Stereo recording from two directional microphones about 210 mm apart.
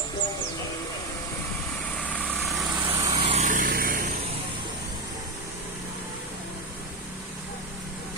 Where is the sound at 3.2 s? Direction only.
30° right (ahead or behind).